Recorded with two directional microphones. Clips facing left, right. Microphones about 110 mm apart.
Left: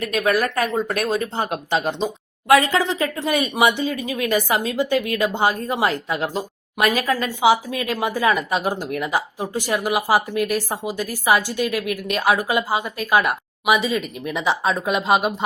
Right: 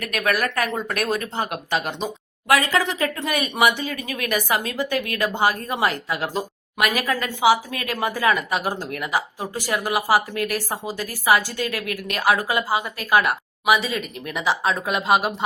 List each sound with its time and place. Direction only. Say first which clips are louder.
0.0 s speech: left 3 dB; 25° left (ahead or behind)